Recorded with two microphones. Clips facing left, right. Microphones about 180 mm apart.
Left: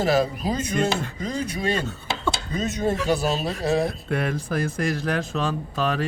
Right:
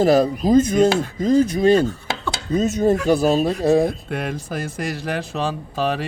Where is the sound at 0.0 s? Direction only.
50° right (ahead or behind).